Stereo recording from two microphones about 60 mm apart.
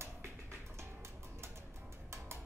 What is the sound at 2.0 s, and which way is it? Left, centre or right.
Music, right.